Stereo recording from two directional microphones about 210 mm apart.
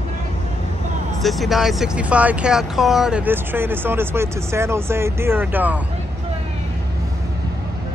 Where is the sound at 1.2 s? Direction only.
Centre (ahead or behind).